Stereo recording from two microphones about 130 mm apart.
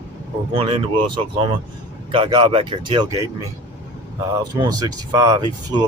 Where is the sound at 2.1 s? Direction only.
40° right (ahead or behind).